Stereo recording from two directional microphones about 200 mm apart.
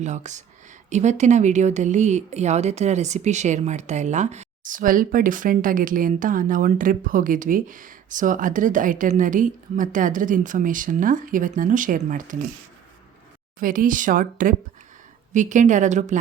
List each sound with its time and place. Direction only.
0.0 s speech: 35° right (ahead or behind)
13.6 s speech: 45° right (ahead or behind)